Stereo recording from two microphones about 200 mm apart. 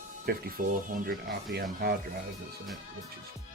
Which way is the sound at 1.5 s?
50° right (ahead or behind).